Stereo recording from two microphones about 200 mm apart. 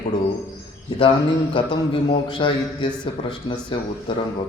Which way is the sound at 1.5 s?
25° left (ahead or behind).